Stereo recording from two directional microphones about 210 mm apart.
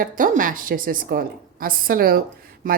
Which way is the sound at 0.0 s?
40° right (ahead or behind).